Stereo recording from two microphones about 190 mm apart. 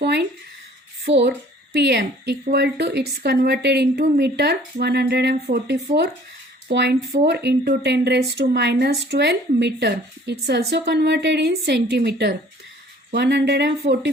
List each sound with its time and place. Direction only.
0.0 s speech: 60° right (ahead or behind)